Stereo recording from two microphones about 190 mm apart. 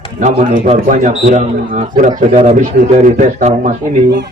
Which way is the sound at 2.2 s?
35° right (ahead or behind).